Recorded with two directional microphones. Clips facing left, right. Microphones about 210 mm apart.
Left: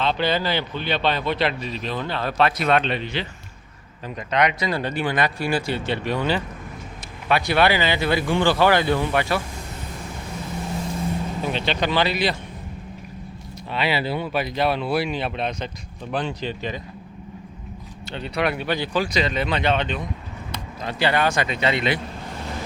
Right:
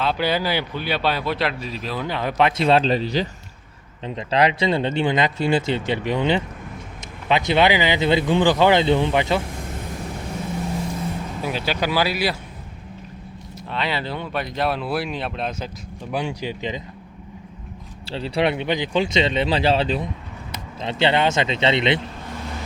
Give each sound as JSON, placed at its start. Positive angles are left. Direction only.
{"t": 0.0, "sound": "a man's voice", "side_deg": -10}
{"t": 4.0, "sound": "speech", "side_deg": -25}
{"t": 11.4, "sound": "a man's voice", "side_deg": -5}
{"t": 13.7, "sound": "a man's voice", "side_deg": 10}
{"t": 18.0, "sound": "speech", "side_deg": -30}
{"t": 20.8, "sound": "speech", "side_deg": -25}